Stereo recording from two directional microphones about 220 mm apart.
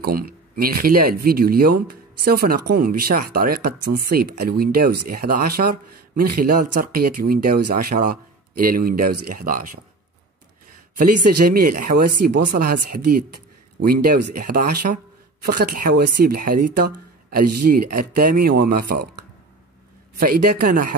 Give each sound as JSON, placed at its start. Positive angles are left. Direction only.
{"t": 0.0, "sound": "speech", "side_deg": -40}
{"t": 11.3, "sound": "speech", "side_deg": -45}
{"t": 20.6, "sound": "speech", "side_deg": -40}